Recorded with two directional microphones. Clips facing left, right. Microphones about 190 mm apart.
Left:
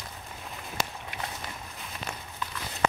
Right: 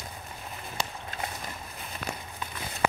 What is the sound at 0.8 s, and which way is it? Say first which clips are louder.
Run: left 1 dB; 30° right (ahead or behind).